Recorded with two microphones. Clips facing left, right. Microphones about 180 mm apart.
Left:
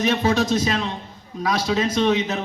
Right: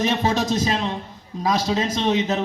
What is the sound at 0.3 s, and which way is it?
A man's voice, 40° right (ahead or behind).